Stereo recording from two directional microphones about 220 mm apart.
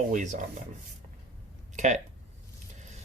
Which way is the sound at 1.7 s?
30° right (ahead or behind).